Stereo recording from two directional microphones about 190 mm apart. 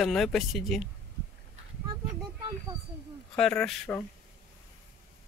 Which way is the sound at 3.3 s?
5° left (ahead or behind).